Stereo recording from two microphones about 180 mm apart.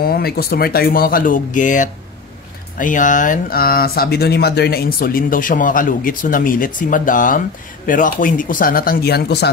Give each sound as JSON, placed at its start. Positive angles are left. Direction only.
{"t": 0.0, "sound": "speech", "side_deg": 60}